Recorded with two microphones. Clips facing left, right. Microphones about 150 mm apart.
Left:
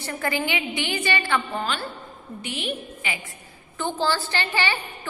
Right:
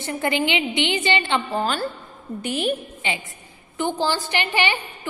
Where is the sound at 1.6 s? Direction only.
40° right (ahead or behind).